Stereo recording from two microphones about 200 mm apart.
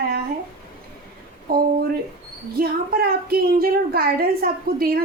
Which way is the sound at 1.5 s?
50° right (ahead or behind).